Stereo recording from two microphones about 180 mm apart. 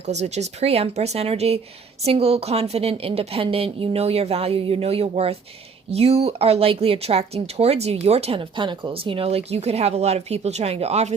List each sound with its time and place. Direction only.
0.0 s speech: 40° right (ahead or behind)